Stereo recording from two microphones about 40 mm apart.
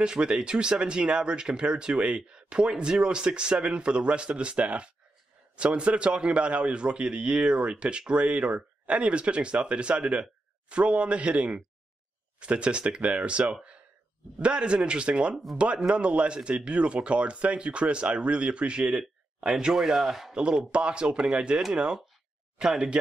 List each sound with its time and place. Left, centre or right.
0.0 s speech: right; by 20.3 s centre
20.3 s speech: right
22.6 s speech: centre